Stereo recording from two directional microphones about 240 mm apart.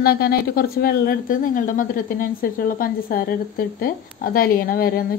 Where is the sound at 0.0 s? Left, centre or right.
Left.